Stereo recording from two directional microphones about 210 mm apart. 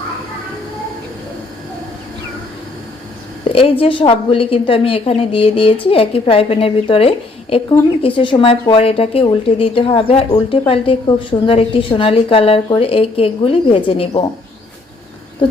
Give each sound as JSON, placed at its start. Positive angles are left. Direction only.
{"t": 3.4, "sound": "a woman's voice", "side_deg": 25}